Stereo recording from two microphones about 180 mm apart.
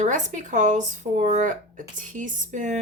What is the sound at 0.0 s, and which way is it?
Speech, 40° right (ahead or behind).